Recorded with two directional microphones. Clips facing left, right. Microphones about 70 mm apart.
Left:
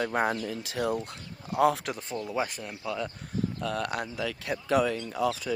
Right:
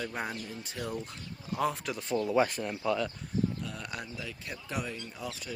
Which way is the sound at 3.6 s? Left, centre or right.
Left.